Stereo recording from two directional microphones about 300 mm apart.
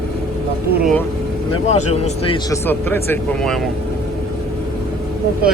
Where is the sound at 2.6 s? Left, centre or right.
Centre.